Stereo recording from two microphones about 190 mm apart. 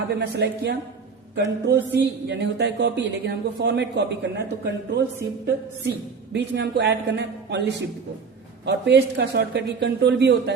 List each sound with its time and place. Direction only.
0.1 s a man's voice: 65° right (ahead or behind)
6.3 s a man's voice: 65° right (ahead or behind)
8.6 s a man's voice: 65° right (ahead or behind)